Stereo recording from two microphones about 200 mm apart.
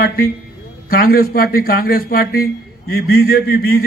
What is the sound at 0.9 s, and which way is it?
A man's voice, 45° left (ahead or behind).